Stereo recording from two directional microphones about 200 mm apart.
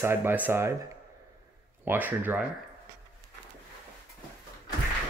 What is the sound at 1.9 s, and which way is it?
Speech, 10° right (ahead or behind).